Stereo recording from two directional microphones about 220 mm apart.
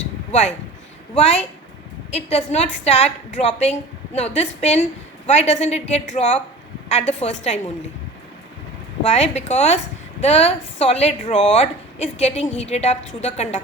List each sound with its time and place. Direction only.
0.3 s a woman's voice: 30° left (ahead or behind)
9.1 s a woman's voice: 30° left (ahead or behind)